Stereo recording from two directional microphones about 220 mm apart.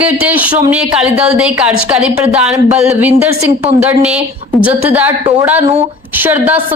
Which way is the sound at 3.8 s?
5° right (ahead or behind).